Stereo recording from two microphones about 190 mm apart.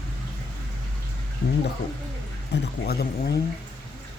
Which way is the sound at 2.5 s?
55° left (ahead or behind).